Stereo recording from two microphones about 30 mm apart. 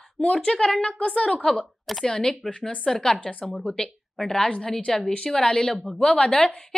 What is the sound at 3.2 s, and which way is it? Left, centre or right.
Speech, left.